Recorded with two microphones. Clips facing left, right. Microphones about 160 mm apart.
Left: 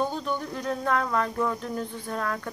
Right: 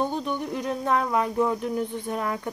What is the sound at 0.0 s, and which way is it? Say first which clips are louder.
Speech: right 1 dB; 20° right (ahead or behind).